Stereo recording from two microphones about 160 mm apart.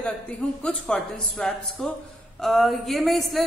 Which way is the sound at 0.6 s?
5° left (ahead or behind).